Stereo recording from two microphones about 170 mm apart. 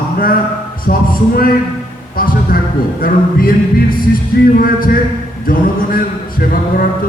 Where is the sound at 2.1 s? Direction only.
55° left (ahead or behind).